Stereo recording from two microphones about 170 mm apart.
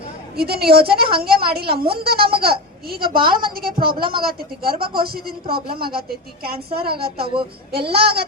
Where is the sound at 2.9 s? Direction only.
60° right (ahead or behind).